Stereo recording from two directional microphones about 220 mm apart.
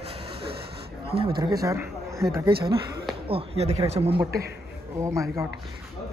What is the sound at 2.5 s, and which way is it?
Speech, 45° right (ahead or behind).